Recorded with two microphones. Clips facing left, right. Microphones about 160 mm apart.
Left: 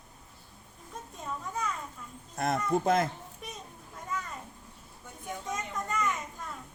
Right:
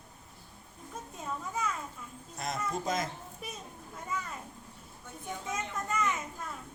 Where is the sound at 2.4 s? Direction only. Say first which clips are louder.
Left 7 dB; 60° left (ahead or behind).